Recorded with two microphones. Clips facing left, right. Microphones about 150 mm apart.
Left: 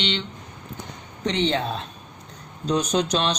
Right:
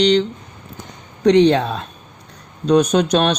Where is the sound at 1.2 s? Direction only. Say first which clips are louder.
Right 11 dB; 75° right (ahead or behind).